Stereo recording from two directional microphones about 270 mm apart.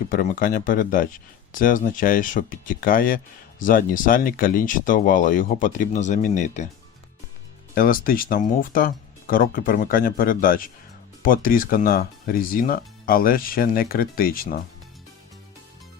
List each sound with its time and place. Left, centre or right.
0.1 s speech: left
7.8 s speech: left